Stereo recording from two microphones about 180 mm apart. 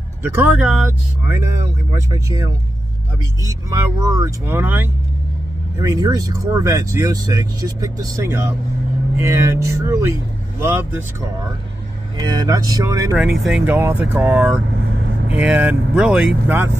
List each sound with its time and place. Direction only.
0.2 s speech: 10° right (ahead or behind)
12.2 s speech: 20° right (ahead or behind)
13.2 s speech: centre (ahead or behind)